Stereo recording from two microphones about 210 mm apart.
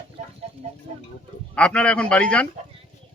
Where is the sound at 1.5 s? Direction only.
5° left (ahead or behind).